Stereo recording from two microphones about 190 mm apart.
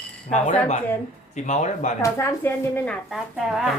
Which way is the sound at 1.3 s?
40° left (ahead or behind).